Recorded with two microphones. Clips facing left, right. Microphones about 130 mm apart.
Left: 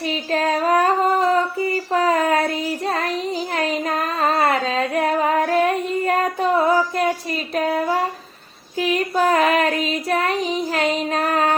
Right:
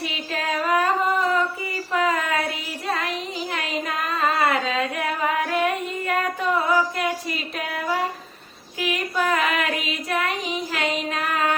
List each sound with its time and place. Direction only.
0.0 s child singing: 40° left (ahead or behind)
3.5 s singing: 35° left (ahead or behind)
8.8 s female singing: 35° left (ahead or behind)